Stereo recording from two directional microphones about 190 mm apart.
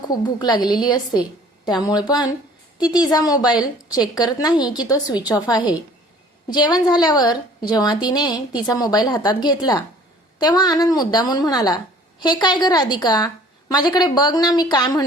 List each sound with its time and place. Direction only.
0.1 s a woman's voice: 20° left (ahead or behind)